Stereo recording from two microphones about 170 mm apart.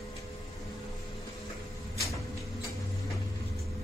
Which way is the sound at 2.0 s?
20° left (ahead or behind).